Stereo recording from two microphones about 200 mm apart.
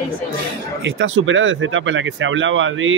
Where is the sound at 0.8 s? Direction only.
75° right (ahead or behind).